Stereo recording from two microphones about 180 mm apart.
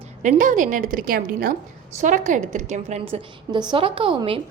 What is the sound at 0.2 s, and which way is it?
A woman's voice, 45° right (ahead or behind).